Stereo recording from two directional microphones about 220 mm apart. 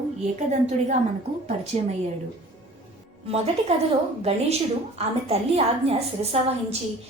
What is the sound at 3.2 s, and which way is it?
Speech, 30° right (ahead or behind).